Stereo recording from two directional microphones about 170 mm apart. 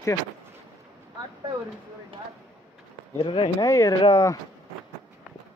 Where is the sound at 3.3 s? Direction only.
25° left (ahead or behind).